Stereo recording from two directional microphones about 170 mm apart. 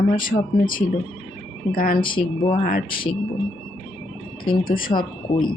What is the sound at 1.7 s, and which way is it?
Speech, 55° left (ahead or behind).